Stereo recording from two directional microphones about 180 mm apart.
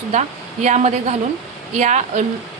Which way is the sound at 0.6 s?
40° right (ahead or behind).